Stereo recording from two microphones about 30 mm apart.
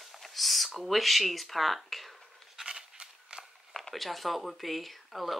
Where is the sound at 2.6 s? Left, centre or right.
Right.